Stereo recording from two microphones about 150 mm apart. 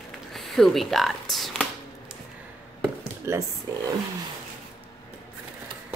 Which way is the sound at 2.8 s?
15° right (ahead or behind).